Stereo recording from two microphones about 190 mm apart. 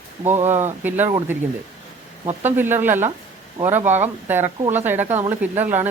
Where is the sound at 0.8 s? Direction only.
10° right (ahead or behind).